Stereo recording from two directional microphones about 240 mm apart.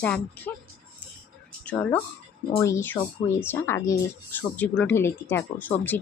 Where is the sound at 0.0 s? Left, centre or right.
Centre.